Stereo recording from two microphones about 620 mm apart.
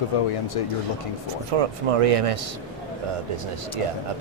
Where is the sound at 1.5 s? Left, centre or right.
Right.